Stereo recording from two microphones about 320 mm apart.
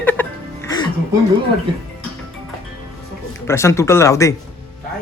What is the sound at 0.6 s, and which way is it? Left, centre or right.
Music, centre.